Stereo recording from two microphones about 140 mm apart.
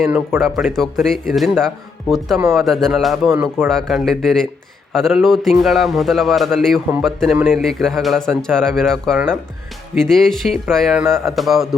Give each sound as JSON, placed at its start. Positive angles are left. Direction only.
{"t": 0.0, "sound": "speech", "side_deg": -15}
{"t": 0.6, "sound": "a man's voice", "side_deg": 0}
{"t": 3.2, "sound": "speech", "side_deg": -15}
{"t": 3.7, "sound": "a man's voice", "side_deg": 0}